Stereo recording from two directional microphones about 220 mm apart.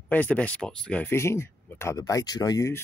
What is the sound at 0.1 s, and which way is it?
Speech, 5° left (ahead or behind).